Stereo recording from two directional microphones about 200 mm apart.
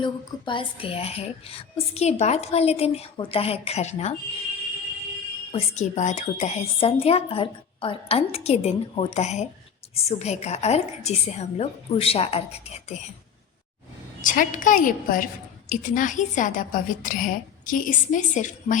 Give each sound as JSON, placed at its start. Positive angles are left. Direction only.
{"t": 0.0, "sound": "a woman's voice", "side_deg": 25}
{"t": 5.5, "sound": "a woman's voice", "side_deg": 35}
{"t": 14.2, "sound": "a woman's voice", "side_deg": 40}